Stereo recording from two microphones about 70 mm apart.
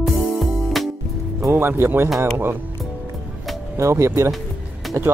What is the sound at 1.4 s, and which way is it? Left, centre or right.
Speech, right.